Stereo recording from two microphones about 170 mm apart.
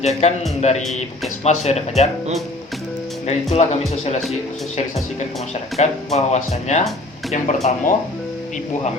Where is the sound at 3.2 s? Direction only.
40° left (ahead or behind).